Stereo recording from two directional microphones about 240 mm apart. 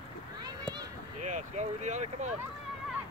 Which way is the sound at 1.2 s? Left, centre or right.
Right.